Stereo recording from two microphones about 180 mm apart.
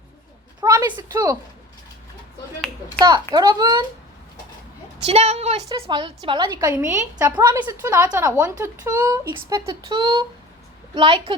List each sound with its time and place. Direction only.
0.6 s a sound: 20° right (ahead or behind)
3.3 s speech: 20° right (ahead or behind)
5.0 s a woman's voice: 35° right (ahead or behind)